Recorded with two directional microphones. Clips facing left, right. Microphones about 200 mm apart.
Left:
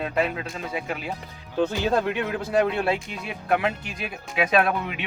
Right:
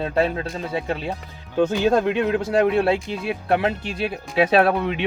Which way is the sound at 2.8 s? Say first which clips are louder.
Right 6 dB; 30° right (ahead or behind).